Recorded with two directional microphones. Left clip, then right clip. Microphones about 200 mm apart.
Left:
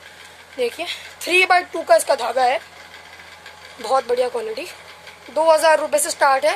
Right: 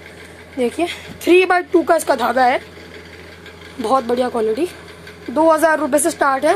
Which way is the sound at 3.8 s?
Centre (ahead or behind).